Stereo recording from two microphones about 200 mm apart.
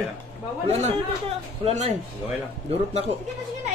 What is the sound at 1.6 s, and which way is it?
A woman's voice, 30° right (ahead or behind).